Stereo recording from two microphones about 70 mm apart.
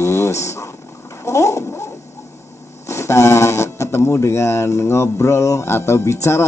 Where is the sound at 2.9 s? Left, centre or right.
Left.